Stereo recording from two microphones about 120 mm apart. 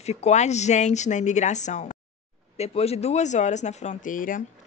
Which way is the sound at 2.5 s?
60° left (ahead or behind).